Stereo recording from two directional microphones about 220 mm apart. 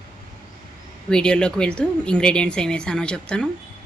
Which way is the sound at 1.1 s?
5° left (ahead or behind).